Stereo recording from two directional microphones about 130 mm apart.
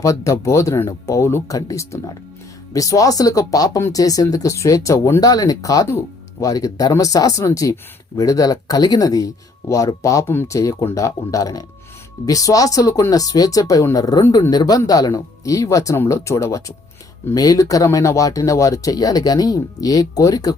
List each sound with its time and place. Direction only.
0.0 s a man's voice: 25° left (ahead or behind)